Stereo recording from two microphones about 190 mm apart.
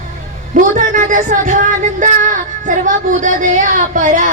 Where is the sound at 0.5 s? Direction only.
45° right (ahead or behind).